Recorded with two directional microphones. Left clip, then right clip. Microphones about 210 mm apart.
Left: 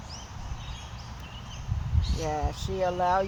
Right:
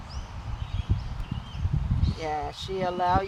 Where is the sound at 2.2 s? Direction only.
30° right (ahead or behind).